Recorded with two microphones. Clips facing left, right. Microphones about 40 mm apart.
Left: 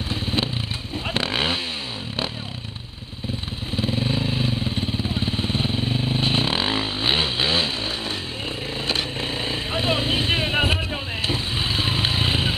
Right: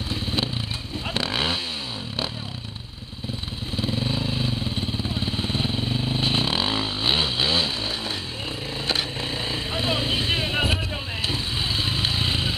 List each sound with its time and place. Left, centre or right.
0.1 s motorcycle: centre
1.0 s vehicle: centre
3.7 s vehicle: centre
8.8 s vehicle: centre